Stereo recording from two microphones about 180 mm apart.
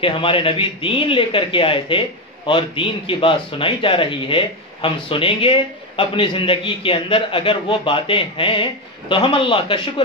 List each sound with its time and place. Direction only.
0.0 s a man's voice: 30° left (ahead or behind)